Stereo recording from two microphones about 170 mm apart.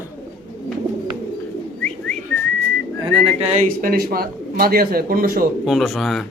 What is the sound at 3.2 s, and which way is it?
Speech, 45° right (ahead or behind).